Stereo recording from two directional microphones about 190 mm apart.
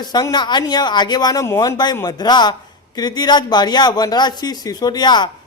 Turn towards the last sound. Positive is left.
turn(degrees=20)  # may be behind; listen again after turning